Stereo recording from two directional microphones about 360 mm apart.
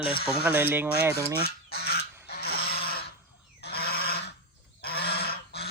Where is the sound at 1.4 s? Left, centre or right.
Left.